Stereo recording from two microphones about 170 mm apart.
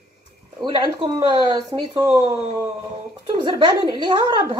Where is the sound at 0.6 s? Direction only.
30° right (ahead or behind).